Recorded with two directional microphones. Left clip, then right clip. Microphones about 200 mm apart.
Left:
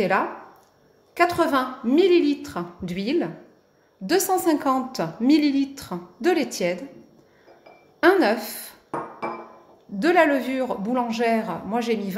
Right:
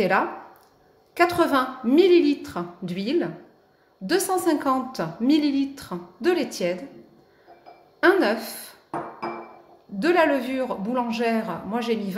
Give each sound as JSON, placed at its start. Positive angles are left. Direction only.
{"t": 1.1, "sound": "a woman's voice", "side_deg": 0}
{"t": 8.0, "sound": "a woman's voice", "side_deg": 15}
{"t": 9.9, "sound": "a woman's voice", "side_deg": 15}